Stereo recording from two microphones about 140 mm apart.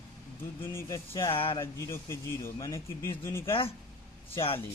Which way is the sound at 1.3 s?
40° left (ahead or behind).